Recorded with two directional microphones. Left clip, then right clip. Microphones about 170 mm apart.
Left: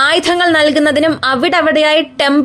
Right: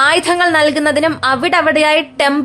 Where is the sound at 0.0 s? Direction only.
25° left (ahead or behind).